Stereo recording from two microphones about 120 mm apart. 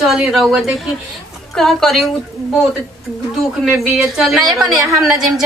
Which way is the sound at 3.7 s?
5° right (ahead or behind).